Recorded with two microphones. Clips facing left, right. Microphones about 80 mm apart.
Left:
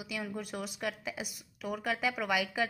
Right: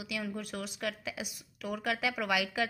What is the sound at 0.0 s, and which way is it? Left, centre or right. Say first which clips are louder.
A woman's voice: right 1 dB; centre.